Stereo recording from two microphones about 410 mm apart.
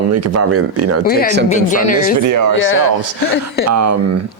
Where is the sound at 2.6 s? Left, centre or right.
Left.